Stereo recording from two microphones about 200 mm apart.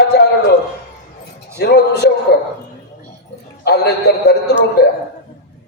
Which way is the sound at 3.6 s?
55° left (ahead or behind).